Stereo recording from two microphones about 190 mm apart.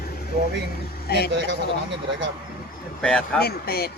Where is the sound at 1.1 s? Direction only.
55° left (ahead or behind).